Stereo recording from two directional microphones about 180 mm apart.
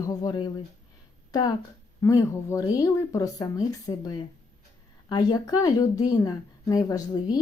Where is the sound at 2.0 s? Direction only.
15° left (ahead or behind).